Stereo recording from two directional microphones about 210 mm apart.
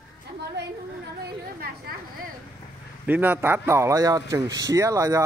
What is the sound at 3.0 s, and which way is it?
Speech, 10° right (ahead or behind).